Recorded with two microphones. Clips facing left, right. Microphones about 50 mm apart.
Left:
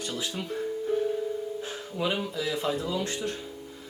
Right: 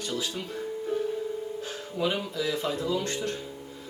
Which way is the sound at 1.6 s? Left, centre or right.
Centre.